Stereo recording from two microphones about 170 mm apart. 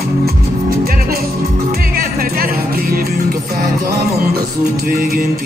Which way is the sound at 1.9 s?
60° right (ahead or behind).